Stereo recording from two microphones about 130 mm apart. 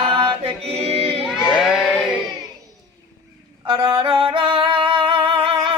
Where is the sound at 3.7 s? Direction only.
40° right (ahead or behind).